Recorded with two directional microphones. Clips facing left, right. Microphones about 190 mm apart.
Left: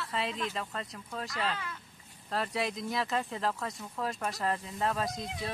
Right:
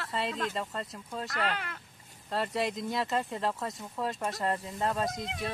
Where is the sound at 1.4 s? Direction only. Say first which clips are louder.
Right 2 dB; 70° right (ahead or behind).